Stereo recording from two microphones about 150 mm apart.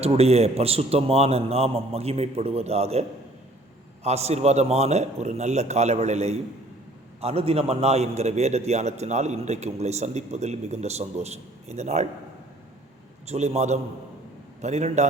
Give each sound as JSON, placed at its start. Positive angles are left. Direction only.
{"t": 0.0, "sound": "a man's voice", "side_deg": -45}
{"t": 13.2, "sound": "a man's voice", "side_deg": -45}